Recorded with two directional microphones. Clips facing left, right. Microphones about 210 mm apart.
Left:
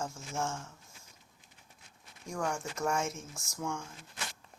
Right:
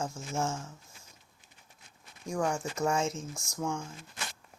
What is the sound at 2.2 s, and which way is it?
Speech, 20° right (ahead or behind).